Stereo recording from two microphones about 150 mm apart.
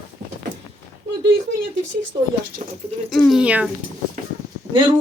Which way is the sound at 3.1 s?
Centre (ahead or behind).